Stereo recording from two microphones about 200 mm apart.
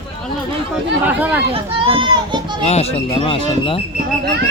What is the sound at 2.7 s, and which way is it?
Speech, 30° left (ahead or behind).